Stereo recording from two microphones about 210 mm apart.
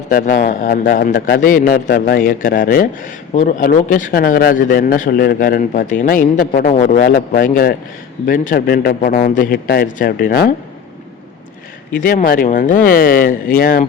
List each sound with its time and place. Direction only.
0.1 s a man's voice: 45° left (ahead or behind)
11.9 s a man's voice: 45° left (ahead or behind)